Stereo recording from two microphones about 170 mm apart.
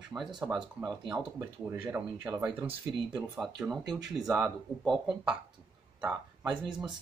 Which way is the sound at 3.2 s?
5° right (ahead or behind).